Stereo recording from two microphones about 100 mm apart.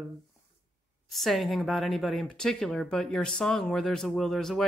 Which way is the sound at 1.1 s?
Centre (ahead or behind).